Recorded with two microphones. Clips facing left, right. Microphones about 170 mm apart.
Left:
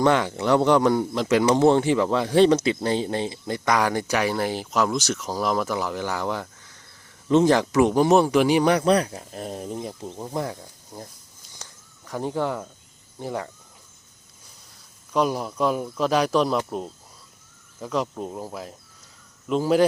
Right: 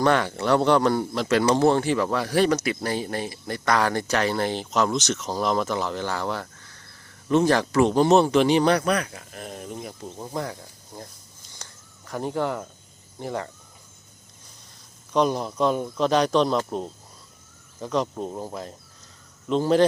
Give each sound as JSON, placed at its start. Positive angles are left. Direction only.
{"t": 0.0, "sound": "speech", "side_deg": 15}
{"t": 8.9, "sound": "speech", "side_deg": 30}
{"t": 10.0, "sound": "speech", "side_deg": 10}
{"t": 11.5, "sound": "a sound", "side_deg": 10}
{"t": 13.1, "sound": "speech", "side_deg": 10}
{"t": 15.1, "sound": "speech", "side_deg": 5}
{"t": 16.6, "sound": "speech", "side_deg": -5}